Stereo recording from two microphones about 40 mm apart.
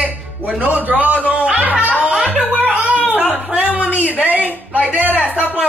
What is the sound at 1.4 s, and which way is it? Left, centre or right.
Music, right.